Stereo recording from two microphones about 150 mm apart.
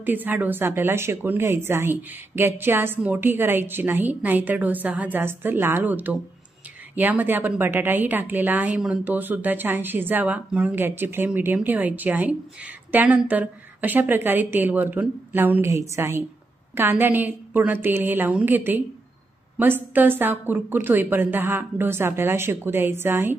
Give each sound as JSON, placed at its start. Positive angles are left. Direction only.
{"t": 0.0, "sound": "a woman's voice", "side_deg": -10}